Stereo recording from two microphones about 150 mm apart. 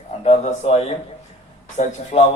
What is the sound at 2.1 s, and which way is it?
Speech, 40° left (ahead or behind).